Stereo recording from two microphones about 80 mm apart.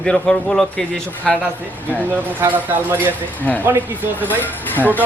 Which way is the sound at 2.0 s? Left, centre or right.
Right.